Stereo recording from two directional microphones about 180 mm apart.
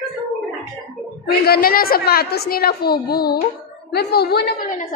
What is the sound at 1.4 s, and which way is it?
A woman's voice, 60° left (ahead or behind).